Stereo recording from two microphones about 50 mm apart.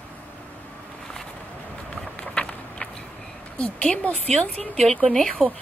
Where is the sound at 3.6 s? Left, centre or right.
Left.